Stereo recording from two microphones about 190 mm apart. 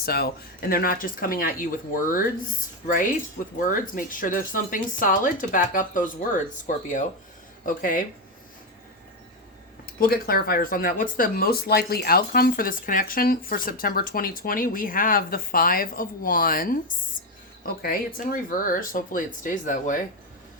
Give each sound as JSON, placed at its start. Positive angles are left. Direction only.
{"t": 0.0, "sound": "speech", "side_deg": 55}
{"t": 7.6, "sound": "speech", "side_deg": 45}
{"t": 9.8, "sound": "speech", "side_deg": 50}
{"t": 17.8, "sound": "speech", "side_deg": 50}